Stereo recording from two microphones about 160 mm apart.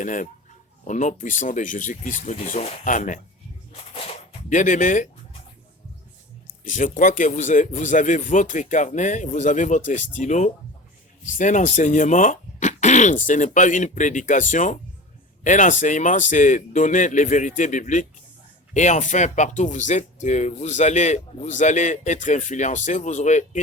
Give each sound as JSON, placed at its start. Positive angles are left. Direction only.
{"t": 0.0, "sound": "speech", "side_deg": 55}
{"t": 3.7, "sound": "a sound", "side_deg": 35}
{"t": 6.7, "sound": "speech", "side_deg": 55}